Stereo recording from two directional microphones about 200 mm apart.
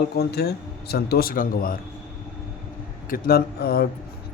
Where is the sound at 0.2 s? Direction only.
55° left (ahead or behind).